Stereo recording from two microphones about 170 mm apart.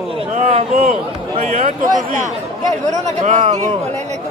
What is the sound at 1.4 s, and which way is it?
Speech, 50° right (ahead or behind).